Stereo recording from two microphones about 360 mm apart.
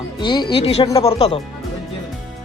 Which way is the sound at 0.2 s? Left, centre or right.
Centre.